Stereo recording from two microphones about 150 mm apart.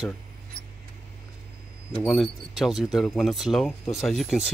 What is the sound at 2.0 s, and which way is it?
Speech, centre (ahead or behind).